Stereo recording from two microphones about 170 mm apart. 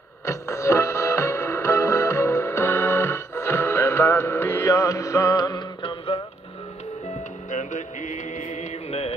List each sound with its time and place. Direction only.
0.2 s music: 15° left (ahead or behind)
7.5 s mantra: 45° left (ahead or behind)